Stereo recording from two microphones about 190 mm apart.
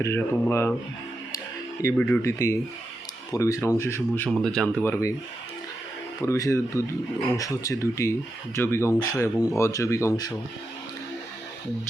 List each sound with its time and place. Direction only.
0.0 s speech: 15° left (ahead or behind)
1.8 s speech: 10° left (ahead or behind)
6.2 s speech: 15° left (ahead or behind)